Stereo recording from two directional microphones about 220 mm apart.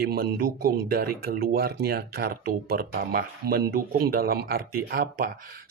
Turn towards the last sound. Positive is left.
turn(degrees=-45)  # may be behind; listen again after turning